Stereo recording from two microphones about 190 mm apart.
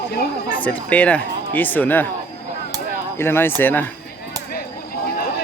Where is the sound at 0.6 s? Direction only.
5° left (ahead or behind).